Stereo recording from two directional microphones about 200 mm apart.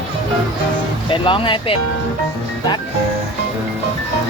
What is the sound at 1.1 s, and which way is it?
Speech, 25° left (ahead or behind).